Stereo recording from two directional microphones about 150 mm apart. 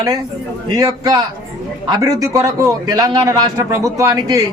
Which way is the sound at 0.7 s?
25° right (ahead or behind).